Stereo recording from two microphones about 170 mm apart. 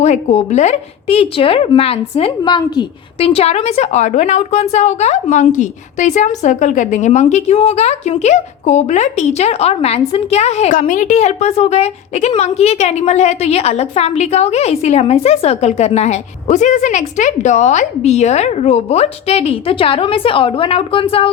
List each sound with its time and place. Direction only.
0.0 s speech: 40° left (ahead or behind)